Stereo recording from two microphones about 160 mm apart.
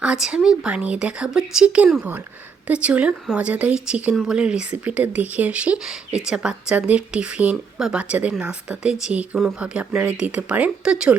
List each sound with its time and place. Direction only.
0.0 s speech: 5° right (ahead or behind)